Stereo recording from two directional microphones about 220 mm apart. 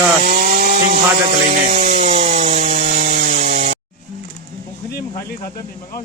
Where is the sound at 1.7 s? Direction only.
35° right (ahead or behind).